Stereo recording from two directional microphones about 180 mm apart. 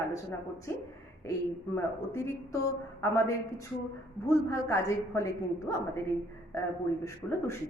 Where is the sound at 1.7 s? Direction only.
15° left (ahead or behind).